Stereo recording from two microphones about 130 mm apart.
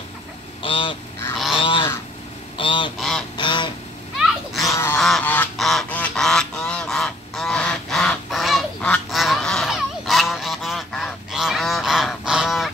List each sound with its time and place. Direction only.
0.6 s goose: 40° left (ahead or behind)
3.0 s goose: centre (ahead or behind)
3.3 s goose: 35° left (ahead or behind)
4.2 s goat: centre (ahead or behind)
4.9 s goose: centre (ahead or behind)
5.2 s goose: 15° left (ahead or behind)
5.6 s goose: centre (ahead or behind)
5.9 s goose: 10° left (ahead or behind)